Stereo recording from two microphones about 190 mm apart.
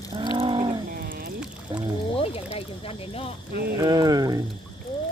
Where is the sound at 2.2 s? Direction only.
30° left (ahead or behind).